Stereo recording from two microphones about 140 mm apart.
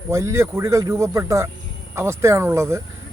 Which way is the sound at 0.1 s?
20° right (ahead or behind).